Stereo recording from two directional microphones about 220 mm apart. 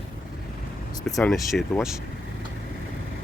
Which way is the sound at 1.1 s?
Centre (ahead or behind).